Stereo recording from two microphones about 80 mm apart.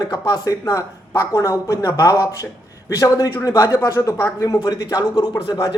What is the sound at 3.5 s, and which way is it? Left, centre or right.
A man's voice, left.